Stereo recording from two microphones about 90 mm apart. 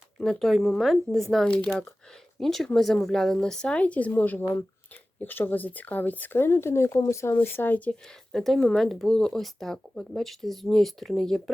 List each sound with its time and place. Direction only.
0.2 s speech: 5° left (ahead or behind)
8.3 s speech: 5° left (ahead or behind)